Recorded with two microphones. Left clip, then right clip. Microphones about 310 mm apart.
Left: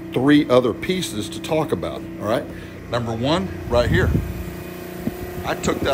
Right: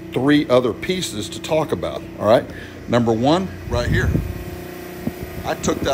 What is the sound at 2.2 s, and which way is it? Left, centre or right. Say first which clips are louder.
Speech: right 8 dB; right.